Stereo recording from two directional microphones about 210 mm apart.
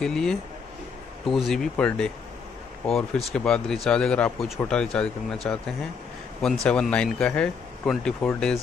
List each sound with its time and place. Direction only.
0.0 s speech: centre (ahead or behind)